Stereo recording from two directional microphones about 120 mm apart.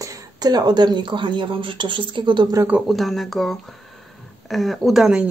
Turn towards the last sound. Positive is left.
turn(degrees=-5)  # may be behind; listen again after turning